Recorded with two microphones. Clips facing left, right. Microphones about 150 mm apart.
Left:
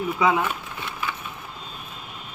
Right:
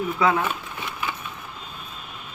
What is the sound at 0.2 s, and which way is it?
Speech, 15° left (ahead or behind).